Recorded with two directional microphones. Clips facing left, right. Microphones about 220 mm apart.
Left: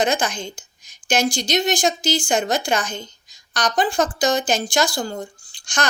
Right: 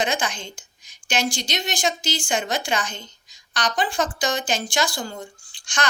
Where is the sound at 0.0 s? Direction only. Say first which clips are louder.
Left 4 dB; 40° left (ahead or behind).